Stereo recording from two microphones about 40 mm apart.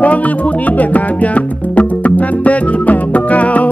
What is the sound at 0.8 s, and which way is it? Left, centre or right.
Music, left.